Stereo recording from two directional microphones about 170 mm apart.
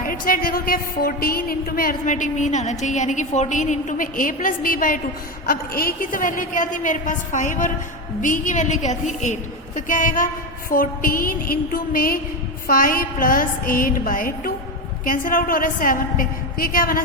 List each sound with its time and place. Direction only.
0.0 s a woman's voice: 55° left (ahead or behind)